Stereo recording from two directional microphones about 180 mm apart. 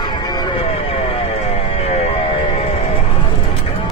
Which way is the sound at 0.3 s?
25° left (ahead or behind).